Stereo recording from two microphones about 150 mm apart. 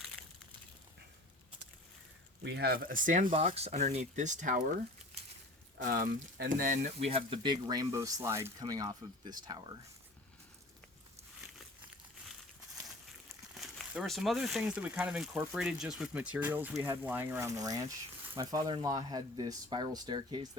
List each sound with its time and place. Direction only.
2.6 s speech: 80° right; by 3.3 s 60° right (ahead or behind)
3.3 s speech: 40° right (ahead or behind)
5.8 s speech: 70° right (ahead or behind)
7.0 s speech: 40° right (ahead or behind)
13.5 s speech: centre (ahead or behind)
16.7 s speech: 20° right (ahead or behind)
17.0 s speech: 10° right (ahead or behind); by 20.5 s 30° right (ahead or behind)